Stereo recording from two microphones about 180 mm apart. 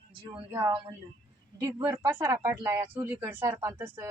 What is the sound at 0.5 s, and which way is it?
Speech, 20° right (ahead or behind).